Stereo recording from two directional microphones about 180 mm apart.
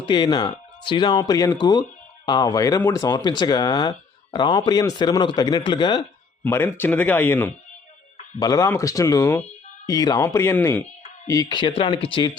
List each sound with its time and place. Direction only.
0.0 s speech: 25° left (ahead or behind)
6.4 s speech: 10° left (ahead or behind); by 12.4 s 25° left (ahead or behind)